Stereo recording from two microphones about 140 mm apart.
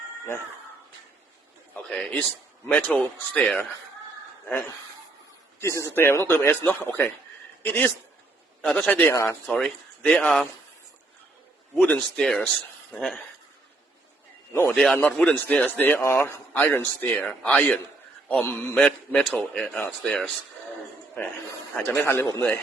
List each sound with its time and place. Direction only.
1.7 s a man's voice: 10° left (ahead or behind)
5.5 s a man's voice: 20° left (ahead or behind)
9.6 s speech: 5° left (ahead or behind)
11.7 s speech: 5° left (ahead or behind)
14.7 s a man's voice: centre (ahead or behind)
21.8 s a man's voice: 15° left (ahead or behind)